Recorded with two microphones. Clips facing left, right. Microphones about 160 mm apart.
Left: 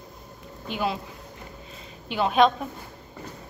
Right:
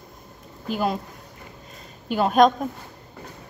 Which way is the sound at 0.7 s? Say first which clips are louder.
Right 3 dB; 40° right (ahead or behind).